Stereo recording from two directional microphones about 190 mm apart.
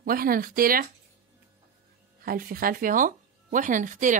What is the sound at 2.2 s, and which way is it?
Speech, 50° right (ahead or behind).